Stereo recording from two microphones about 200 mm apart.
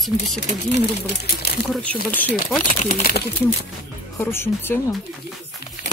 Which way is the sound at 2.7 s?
45° left (ahead or behind).